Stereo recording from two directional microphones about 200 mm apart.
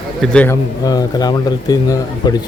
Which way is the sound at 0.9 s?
20° left (ahead or behind).